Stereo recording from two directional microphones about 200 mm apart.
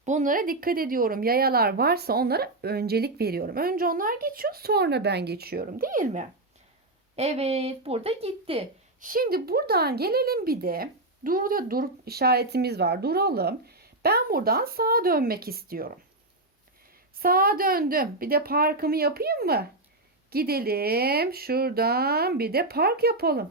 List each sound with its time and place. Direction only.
0.0 s speech: 40° right (ahead or behind)
7.2 s a woman's voice: 30° right (ahead or behind)
9.0 s speech: 45° right (ahead or behind)
17.2 s speech: 45° right (ahead or behind)